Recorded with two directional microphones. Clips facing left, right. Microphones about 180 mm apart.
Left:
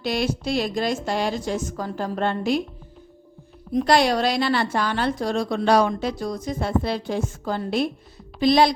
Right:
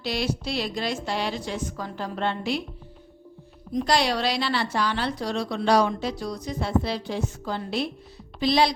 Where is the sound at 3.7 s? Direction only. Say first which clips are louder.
Left 5 dB; 55° left (ahead or behind).